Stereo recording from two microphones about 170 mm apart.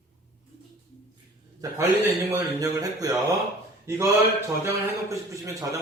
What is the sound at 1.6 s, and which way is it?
A man's voice, 20° right (ahead or behind).